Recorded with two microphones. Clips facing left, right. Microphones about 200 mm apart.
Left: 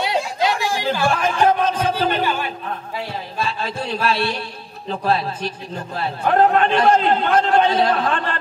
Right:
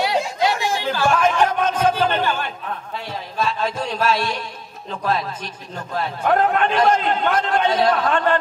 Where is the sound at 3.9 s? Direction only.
35° left (ahead or behind).